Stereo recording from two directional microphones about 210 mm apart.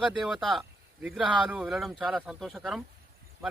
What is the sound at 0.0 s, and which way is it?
Speech, centre (ahead or behind).